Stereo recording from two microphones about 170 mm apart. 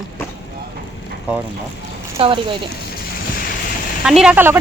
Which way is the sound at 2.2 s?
30° right (ahead or behind).